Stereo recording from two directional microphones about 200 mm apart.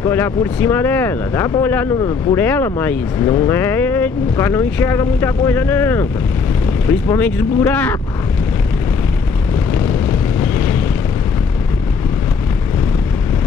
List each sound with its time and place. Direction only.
0.0 s speech: 10° left (ahead or behind)